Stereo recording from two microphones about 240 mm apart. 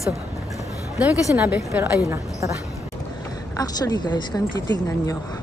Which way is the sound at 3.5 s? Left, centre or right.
Centre.